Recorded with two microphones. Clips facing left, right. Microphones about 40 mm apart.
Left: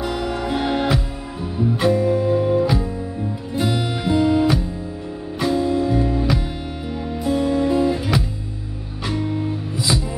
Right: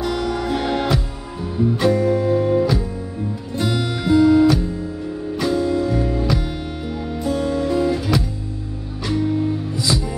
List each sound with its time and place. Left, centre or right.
0.0 s music: centre